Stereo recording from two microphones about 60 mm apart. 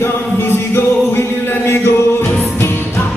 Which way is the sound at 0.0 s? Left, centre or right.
Left.